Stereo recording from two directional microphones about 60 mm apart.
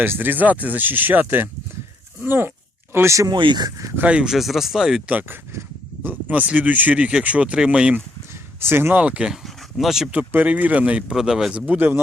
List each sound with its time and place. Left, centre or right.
0.0 s speech: right
4.0 s speech: centre
4.3 s speech: centre
6.0 s speech: right
8.6 s speech: right
9.0 s speech: right
9.3 s a sound: centre
10.1 s speech: right
11.1 s speech: centre
11.6 s speech: right